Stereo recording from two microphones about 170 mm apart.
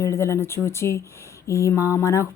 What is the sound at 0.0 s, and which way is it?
Speech, 15° left (ahead or behind).